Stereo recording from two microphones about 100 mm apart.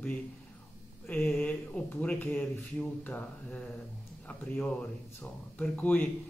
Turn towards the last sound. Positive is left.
turn(degrees=15)  # may be behind; listen again after turning